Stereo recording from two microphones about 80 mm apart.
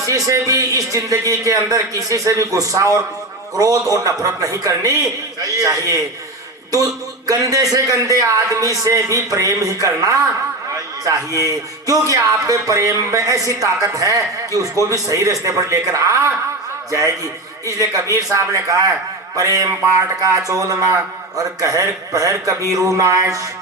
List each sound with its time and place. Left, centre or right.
0.3 s speech: right
11.3 s speech: right
17.7 s speech: right